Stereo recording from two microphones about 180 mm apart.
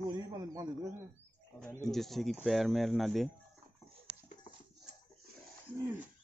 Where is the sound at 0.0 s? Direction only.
20° right (ahead or behind).